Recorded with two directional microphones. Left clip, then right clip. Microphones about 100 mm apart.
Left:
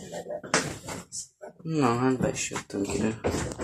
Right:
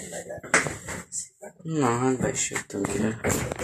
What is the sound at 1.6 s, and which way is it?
Speech, 5° right (ahead or behind).